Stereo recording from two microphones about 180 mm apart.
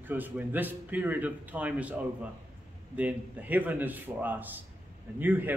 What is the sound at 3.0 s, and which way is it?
A man's voice, 10° right (ahead or behind).